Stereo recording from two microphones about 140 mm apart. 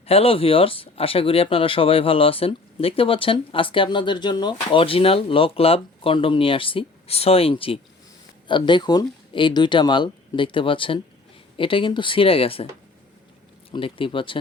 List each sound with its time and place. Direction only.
0.0 s speech: 45° left (ahead or behind)
13.7 s speech: 40° left (ahead or behind)